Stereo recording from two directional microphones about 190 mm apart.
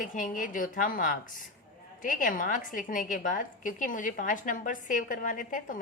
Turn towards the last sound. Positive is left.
turn(degrees=45)  # may be behind; listen again after turning